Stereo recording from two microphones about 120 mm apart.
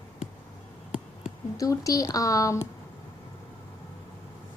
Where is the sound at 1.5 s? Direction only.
30° left (ahead or behind).